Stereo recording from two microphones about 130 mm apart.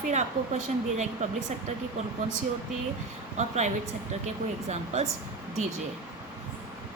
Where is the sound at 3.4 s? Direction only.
65° right (ahead or behind).